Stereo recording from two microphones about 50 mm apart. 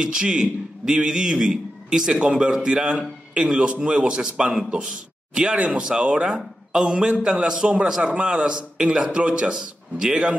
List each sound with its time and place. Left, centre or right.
0.0 s a man's voice: centre